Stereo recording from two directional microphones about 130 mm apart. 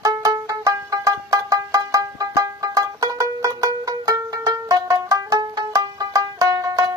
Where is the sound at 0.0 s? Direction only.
25° right (ahead or behind).